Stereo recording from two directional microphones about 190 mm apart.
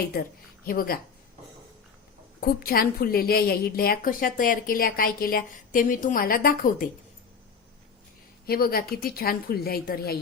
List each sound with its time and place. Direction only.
0.1 s a woman's voice: 50° left (ahead or behind)
2.4 s a woman's voice: 50° left (ahead or behind)
8.4 s a woman's voice: 50° left (ahead or behind)